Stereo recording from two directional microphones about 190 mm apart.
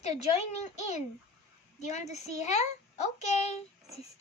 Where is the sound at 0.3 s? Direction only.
35° left (ahead or behind).